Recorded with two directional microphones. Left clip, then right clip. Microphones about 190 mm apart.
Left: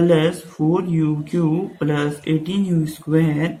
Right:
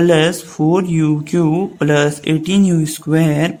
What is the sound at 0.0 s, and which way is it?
Speech, 50° right (ahead or behind).